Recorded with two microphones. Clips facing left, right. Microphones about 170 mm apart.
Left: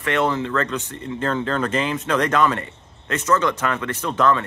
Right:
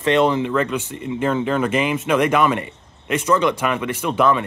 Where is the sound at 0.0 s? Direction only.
20° right (ahead or behind).